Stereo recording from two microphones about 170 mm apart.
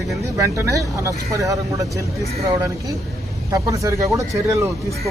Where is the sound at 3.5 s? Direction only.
20° right (ahead or behind).